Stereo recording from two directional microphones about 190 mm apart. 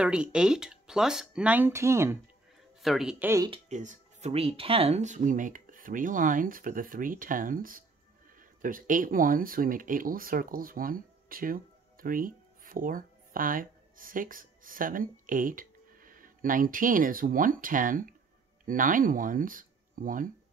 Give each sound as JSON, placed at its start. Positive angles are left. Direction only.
{"t": 0.0, "sound": "speech", "side_deg": -5}
{"t": 2.8, "sound": "speech", "side_deg": 0}
{"t": 3.4, "sound": "speech", "side_deg": -35}